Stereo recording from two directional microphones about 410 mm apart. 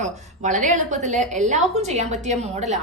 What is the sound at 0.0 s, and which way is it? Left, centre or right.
A woman's voice, centre.